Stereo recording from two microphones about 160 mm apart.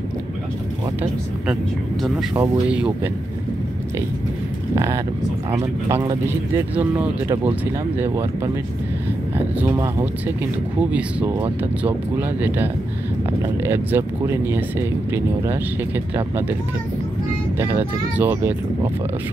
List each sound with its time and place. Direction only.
2.7 s speech: 5° right (ahead or behind)
4.7 s speech: 20° right (ahead or behind)
9.6 s speech: 15° right (ahead or behind)
13.7 s speech: 15° right (ahead or behind)
16.2 s speech: 15° right (ahead or behind)
17.6 s speech: 15° right (ahead or behind)